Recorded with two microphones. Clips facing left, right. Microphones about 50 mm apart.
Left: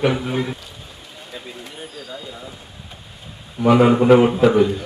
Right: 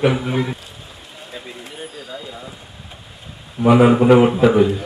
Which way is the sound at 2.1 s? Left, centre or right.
Centre.